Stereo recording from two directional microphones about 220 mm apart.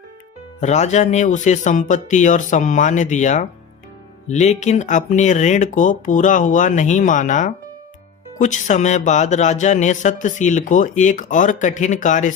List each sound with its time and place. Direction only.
0.6 s speech: 30° left (ahead or behind)